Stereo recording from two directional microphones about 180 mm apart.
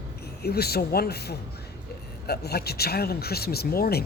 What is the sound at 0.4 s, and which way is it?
Speech, 60° left (ahead or behind).